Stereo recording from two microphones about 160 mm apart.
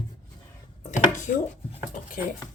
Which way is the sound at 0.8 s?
50° left (ahead or behind).